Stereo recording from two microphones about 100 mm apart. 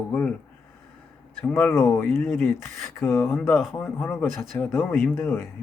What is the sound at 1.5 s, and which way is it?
Speech, 20° left (ahead or behind).